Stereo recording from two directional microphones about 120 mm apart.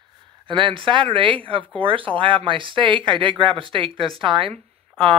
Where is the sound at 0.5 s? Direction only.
45° right (ahead or behind).